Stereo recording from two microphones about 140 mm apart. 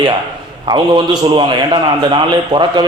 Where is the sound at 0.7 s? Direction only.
35° right (ahead or behind).